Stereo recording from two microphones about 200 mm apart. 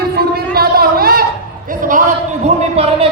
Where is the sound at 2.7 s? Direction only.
30° right (ahead or behind).